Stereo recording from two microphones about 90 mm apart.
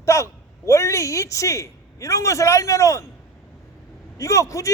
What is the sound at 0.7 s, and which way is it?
A man's voice, 35° left (ahead or behind).